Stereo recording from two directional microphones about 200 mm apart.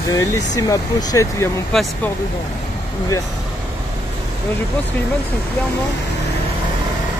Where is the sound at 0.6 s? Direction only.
15° left (ahead or behind).